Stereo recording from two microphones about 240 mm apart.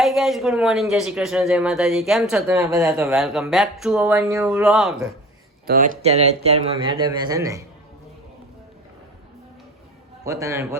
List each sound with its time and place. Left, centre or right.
0.0 s speech: centre
5.6 s speech: right; by 7.6 s centre
10.2 s a man's voice: centre